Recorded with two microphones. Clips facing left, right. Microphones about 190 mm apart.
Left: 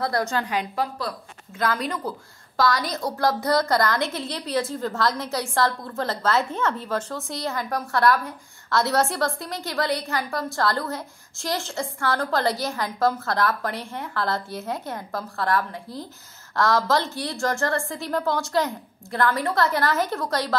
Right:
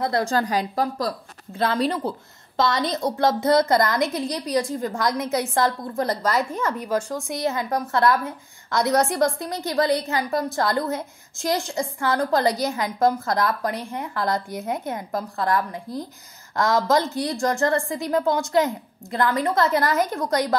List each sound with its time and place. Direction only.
0.0 s a woman's voice: 25° right (ahead or behind)
0.3 s a woman's voice: 35° right (ahead or behind); by 20.5 s 20° right (ahead or behind)